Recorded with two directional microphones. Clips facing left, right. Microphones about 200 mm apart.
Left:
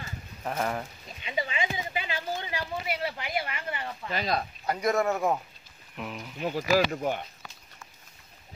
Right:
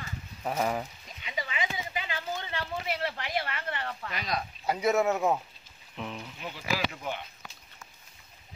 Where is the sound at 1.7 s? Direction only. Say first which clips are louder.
Left 3 dB; 15° left (ahead or behind).